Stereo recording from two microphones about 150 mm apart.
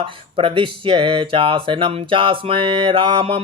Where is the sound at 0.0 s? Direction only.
35° right (ahead or behind).